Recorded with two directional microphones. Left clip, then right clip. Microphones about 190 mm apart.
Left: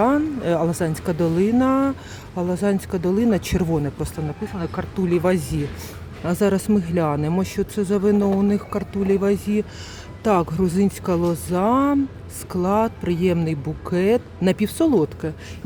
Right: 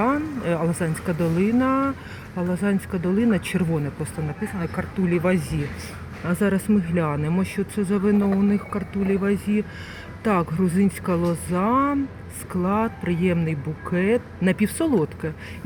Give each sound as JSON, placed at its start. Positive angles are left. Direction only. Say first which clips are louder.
{"t": 0.0, "sound": "speech", "louder": "left 4 dB", "side_deg": 20}